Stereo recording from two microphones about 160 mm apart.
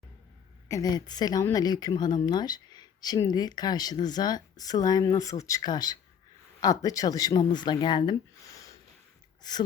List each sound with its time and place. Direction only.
0.7 s speech: 25° left (ahead or behind)
8.5 s a sound: 20° left (ahead or behind)
9.4 s speech: 25° left (ahead or behind)